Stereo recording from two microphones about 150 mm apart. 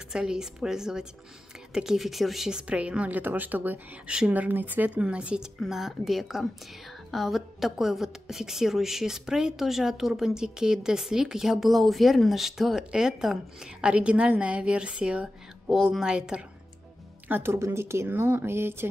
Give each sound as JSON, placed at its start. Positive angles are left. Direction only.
{"t": 0.1, "sound": "a woman's voice", "side_deg": -5}